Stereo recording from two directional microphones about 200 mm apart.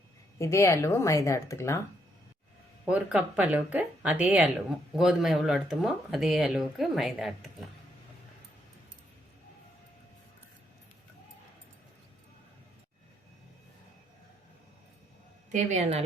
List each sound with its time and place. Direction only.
0.3 s speech: 15° left (ahead or behind)
2.8 s speech: 5° right (ahead or behind)
15.5 s a woman's voice: 35° right (ahead or behind)